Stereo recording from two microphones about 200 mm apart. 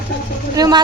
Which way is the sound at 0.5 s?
20° right (ahead or behind).